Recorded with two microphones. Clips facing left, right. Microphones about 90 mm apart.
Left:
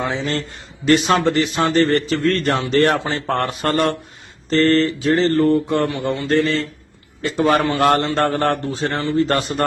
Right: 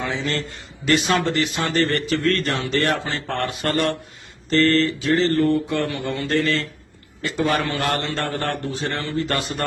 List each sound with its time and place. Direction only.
0.1 s a man's voice: 40° left (ahead or behind)
0.9 s a man's voice: 30° left (ahead or behind)
1.1 s a man's voice: 40° left (ahead or behind)
7.2 s a man's voice: 30° left (ahead or behind)